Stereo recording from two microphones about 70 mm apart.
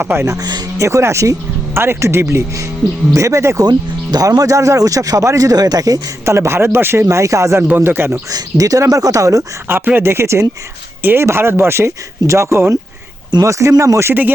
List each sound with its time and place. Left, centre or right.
0.0 s speech: right
0.3 s speech: right
0.8 s speech: right
3.7 s speech: right
6.2 s speech: right
7.9 s speech: right
8.3 s speech: right
9.6 s speech: right